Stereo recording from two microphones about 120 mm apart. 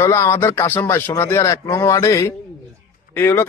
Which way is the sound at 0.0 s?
25° left (ahead or behind).